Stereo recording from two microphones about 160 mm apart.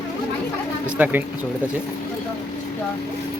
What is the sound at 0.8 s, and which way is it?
Speech, 10° right (ahead or behind).